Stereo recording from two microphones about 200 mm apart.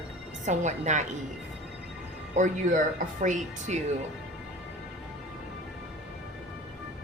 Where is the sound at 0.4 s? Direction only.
35° right (ahead or behind).